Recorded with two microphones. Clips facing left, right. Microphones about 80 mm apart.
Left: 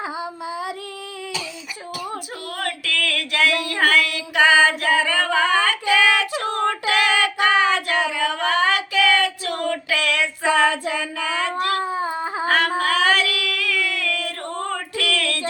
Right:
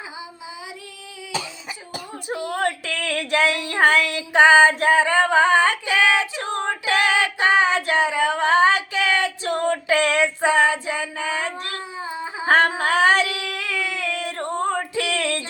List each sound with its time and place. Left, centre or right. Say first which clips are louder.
2.3 s female singing: right 5 dB; right
3.7 s music: right 1 dB; right
4.8 s female singing: right 3 dB; right
11.5 s a sound: left 9 dB; left
12.5 s a sound: right 4 dB; right
12.8 s female singing: right 1 dB; right